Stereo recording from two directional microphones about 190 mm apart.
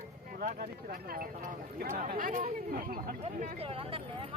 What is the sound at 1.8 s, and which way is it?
Speech, 50° right (ahead or behind).